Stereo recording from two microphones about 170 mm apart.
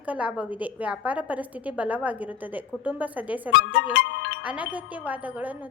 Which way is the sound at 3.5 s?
85° left.